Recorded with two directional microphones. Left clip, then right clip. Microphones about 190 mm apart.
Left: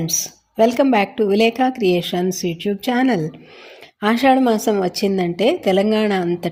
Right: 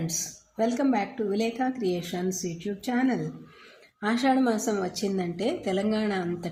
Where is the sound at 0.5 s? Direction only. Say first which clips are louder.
Left 11 dB; 35° left (ahead or behind).